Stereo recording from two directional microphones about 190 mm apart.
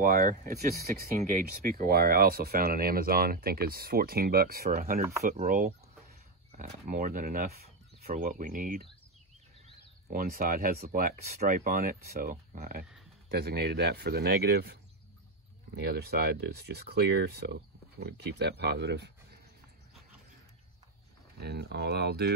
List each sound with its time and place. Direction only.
0.0 s speech: 50° right (ahead or behind)
10.0 s speech: 50° right (ahead or behind)
15.8 s speech: 55° right (ahead or behind)
21.4 s speech: 60° right (ahead or behind)